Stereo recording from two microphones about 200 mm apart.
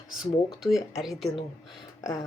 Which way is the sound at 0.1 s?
Centre (ahead or behind).